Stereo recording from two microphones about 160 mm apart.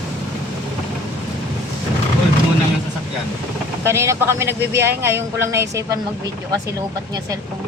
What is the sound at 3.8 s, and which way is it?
Speech, 15° right (ahead or behind).